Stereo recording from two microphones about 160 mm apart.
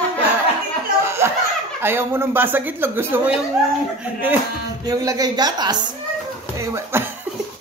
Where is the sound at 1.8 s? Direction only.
15° right (ahead or behind).